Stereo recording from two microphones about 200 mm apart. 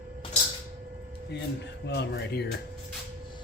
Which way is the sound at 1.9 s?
55° left (ahead or behind).